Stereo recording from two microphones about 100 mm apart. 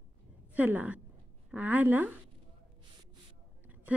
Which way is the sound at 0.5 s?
15° right (ahead or behind).